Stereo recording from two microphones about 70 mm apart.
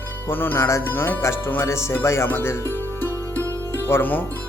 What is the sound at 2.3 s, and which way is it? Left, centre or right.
Music, left.